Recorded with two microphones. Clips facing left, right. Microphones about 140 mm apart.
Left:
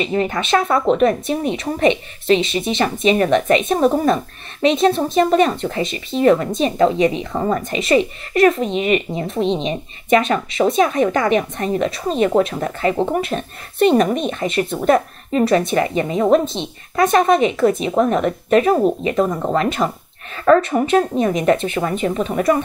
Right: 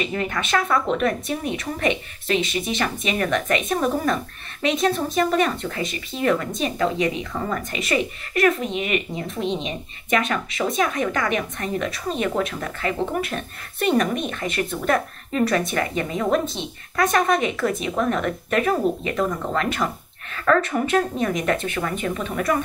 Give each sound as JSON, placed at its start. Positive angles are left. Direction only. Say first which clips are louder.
{"t": 0.0, "sound": "a woman's voice", "louder": "left 6 dB", "side_deg": 25}